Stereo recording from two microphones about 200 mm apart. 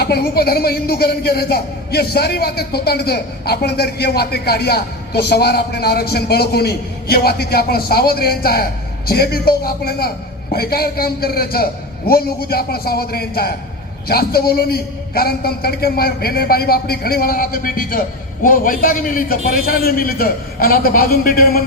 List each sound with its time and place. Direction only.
0.0 s speech: 50° left (ahead or behind)